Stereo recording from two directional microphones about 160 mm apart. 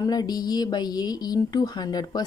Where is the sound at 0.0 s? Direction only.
25° left (ahead or behind).